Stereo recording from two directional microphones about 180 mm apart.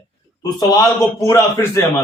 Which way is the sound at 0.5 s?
20° left (ahead or behind).